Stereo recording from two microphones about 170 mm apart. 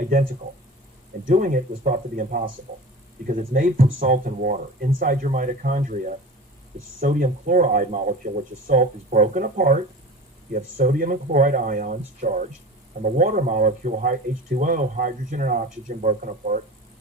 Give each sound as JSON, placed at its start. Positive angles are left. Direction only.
{"t": 1.3, "sound": "speech", "side_deg": -55}